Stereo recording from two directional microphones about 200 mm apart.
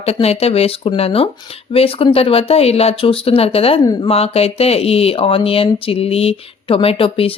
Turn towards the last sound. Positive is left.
turn(degrees=25)  # may be behind; listen again after turning